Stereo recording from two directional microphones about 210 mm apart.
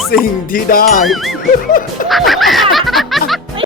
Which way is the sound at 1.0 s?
Centre (ahead or behind).